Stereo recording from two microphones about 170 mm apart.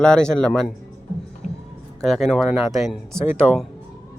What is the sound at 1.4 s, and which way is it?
Music, 45° left (ahead or behind).